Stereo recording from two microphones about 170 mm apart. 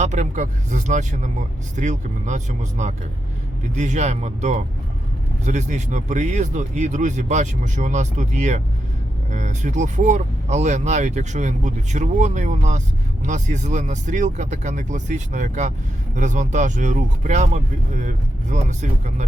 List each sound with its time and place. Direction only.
0.0 s speech: 45° right (ahead or behind)